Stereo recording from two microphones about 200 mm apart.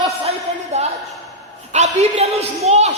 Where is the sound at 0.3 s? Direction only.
30° right (ahead or behind).